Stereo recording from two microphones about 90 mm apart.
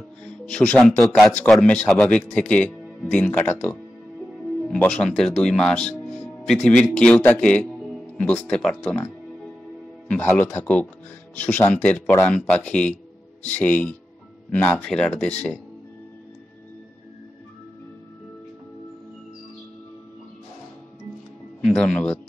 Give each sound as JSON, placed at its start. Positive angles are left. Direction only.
{"t": 0.5, "sound": "speech", "side_deg": 10}
{"t": 1.0, "sound": "a man's voice", "side_deg": 0}
{"t": 10.2, "sound": "speech", "side_deg": 25}
{"t": 21.6, "sound": "speech", "side_deg": 10}